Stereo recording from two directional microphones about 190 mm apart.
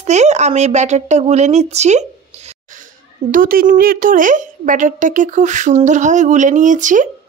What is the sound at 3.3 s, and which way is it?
A woman's voice, 50° right (ahead or behind).